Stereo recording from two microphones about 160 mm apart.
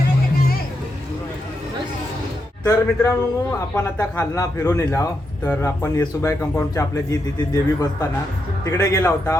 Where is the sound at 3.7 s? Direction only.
15° left (ahead or behind).